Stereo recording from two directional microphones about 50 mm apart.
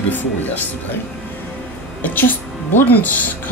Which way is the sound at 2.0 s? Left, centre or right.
Left.